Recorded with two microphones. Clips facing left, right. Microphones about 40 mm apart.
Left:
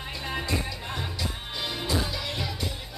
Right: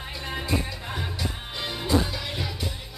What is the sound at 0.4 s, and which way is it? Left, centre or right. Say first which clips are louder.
Music: right 3 dB; centre.